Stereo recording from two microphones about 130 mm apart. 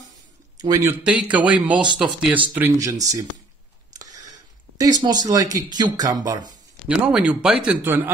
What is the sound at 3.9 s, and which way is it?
Speech, 30° right (ahead or behind).